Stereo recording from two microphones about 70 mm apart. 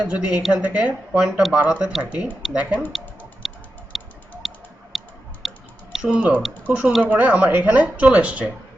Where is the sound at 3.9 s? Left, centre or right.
Centre.